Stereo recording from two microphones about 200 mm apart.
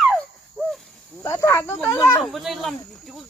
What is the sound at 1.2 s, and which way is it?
Speech, 15° left (ahead or behind).